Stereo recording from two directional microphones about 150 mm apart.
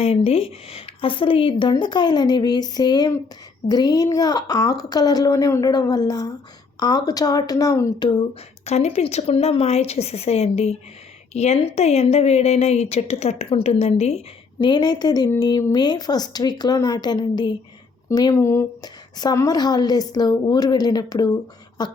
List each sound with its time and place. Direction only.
0.0 s a woman's voice: 40° left (ahead or behind)
8.6 s a woman's voice: 45° left (ahead or behind)
14.6 s a woman's voice: 30° left (ahead or behind)